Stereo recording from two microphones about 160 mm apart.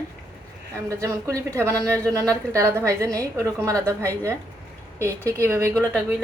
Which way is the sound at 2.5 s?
20° right (ahead or behind).